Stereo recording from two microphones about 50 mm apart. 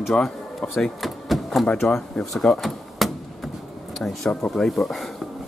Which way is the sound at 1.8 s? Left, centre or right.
Centre.